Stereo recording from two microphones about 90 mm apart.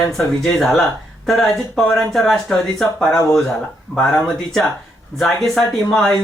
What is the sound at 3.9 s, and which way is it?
Speech, 25° left (ahead or behind).